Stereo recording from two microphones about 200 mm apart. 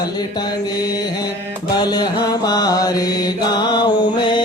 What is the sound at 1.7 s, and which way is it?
Mantra, 20° left (ahead or behind).